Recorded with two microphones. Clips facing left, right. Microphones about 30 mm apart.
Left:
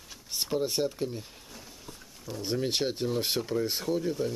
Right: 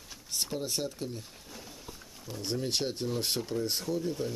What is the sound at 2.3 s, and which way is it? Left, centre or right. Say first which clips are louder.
Speech: left 3 dB; centre.